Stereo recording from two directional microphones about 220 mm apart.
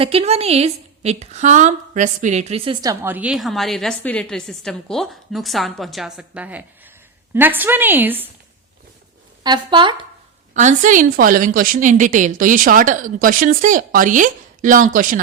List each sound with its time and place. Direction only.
0.0 s a woman's voice: 25° right (ahead or behind); by 8.3 s 10° right (ahead or behind)
9.4 s speech: 20° right (ahead or behind)
10.5 s a woman's voice: 35° right (ahead or behind)